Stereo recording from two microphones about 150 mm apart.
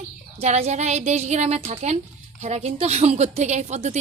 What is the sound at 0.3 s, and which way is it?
A woman's voice, 45° right (ahead or behind).